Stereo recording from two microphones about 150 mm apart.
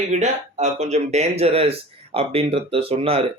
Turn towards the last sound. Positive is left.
turn(degrees=-40)  # may be behind; listen again after turning